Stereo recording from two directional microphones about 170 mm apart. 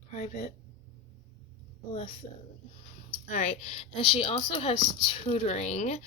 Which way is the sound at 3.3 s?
45° left (ahead or behind).